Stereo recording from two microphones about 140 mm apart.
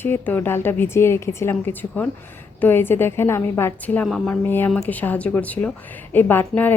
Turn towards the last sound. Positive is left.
turn(degrees=15)  # may be behind; listen again after turning